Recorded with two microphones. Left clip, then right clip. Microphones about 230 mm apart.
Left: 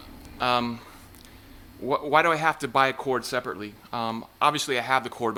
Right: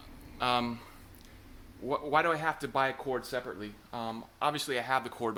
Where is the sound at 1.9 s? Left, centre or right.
Left.